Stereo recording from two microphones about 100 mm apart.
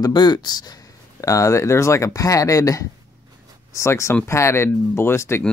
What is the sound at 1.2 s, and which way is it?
Speech, 30° left (ahead or behind).